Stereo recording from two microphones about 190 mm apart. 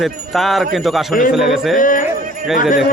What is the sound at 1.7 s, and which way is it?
Speech, 45° left (ahead or behind).